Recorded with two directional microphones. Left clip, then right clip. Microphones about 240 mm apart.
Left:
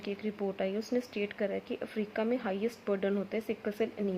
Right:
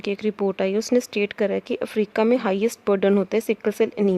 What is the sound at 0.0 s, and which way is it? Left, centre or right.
Speech, right.